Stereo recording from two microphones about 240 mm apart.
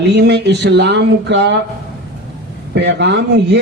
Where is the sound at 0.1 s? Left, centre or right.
Right.